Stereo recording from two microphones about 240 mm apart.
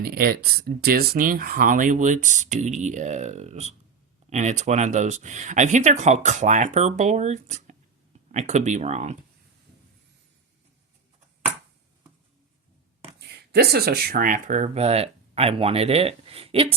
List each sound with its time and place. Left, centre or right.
0.0 s speech: right
13.1 s speech: right